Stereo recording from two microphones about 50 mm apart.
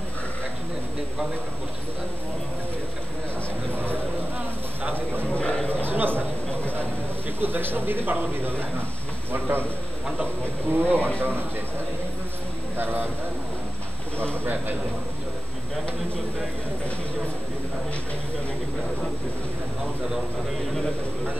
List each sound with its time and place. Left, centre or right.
3.7 s a man's voice: right
5.3 s a sound: left
5.9 s a man's voice: right
10.7 s a man's voice: right
12.7 s a man's voice: right
14.3 s a man's voice: right